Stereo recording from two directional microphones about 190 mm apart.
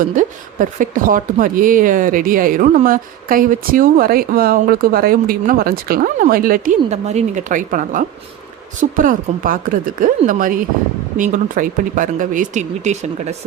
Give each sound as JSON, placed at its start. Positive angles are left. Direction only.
{"t": 0.0, "sound": "speech", "side_deg": -45}